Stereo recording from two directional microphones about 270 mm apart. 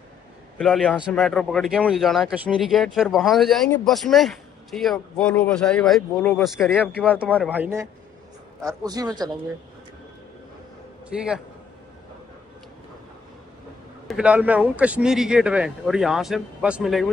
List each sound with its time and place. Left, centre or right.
0.6 s speech: centre
11.1 s speech: centre
14.0 s speech: centre